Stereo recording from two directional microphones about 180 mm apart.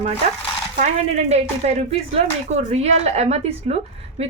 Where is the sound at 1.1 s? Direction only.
35° right (ahead or behind).